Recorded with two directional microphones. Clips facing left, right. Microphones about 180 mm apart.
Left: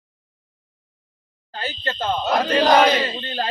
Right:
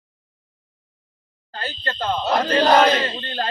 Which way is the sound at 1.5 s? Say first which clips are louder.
Left 1 dB; 15° left (ahead or behind).